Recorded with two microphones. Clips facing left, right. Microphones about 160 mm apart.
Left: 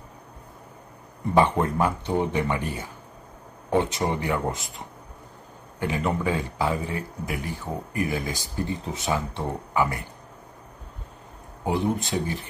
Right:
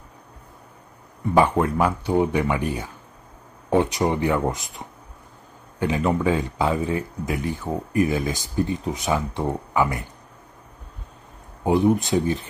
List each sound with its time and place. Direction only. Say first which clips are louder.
1.3 s speech: right 2 dB; 10° right (ahead or behind)
4.2 s speech: right 4 dB; 20° right (ahead or behind)
11.6 s speech: right 6 dB; 20° right (ahead or behind)